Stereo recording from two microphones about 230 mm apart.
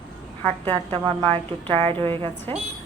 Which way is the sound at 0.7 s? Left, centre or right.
Centre.